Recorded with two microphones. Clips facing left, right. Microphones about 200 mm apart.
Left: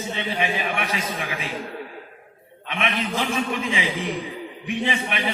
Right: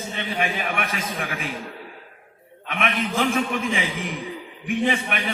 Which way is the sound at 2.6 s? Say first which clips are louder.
Right 1 dB; 50° right (ahead or behind).